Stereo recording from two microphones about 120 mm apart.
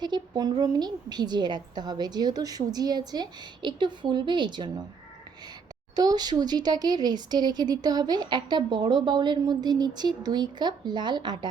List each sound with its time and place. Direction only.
0.0 s speech: 35° right (ahead or behind)
6.0 s speech: 35° right (ahead or behind)